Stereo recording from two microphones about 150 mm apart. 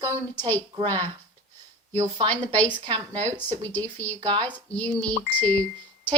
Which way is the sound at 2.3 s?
10° left (ahead or behind).